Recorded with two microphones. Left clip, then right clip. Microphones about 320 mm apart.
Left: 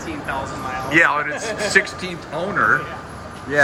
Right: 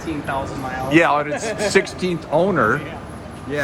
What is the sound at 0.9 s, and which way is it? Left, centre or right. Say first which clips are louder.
Speech: even; centre.